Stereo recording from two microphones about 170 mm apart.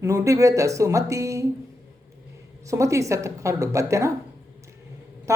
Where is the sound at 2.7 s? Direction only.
20° right (ahead or behind).